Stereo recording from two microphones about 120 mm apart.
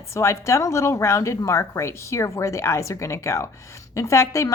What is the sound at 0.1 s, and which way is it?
A woman's voice, 25° left (ahead or behind).